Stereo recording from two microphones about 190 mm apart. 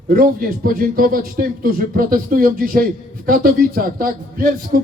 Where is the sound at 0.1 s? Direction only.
50° right (ahead or behind).